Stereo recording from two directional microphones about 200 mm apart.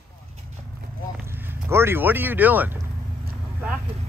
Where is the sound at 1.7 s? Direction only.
10° right (ahead or behind).